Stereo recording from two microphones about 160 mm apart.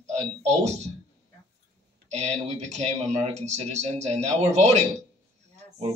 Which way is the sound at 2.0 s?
45° right (ahead or behind).